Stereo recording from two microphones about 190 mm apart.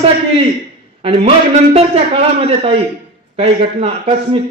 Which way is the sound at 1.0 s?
30° right (ahead or behind).